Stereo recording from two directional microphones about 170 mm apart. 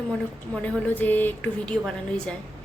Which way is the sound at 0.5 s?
10° left (ahead or behind).